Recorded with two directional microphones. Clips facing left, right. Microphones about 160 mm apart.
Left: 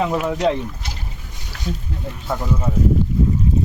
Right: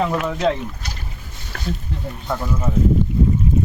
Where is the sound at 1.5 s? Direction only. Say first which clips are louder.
Right 1 dB; 50° right (ahead or behind).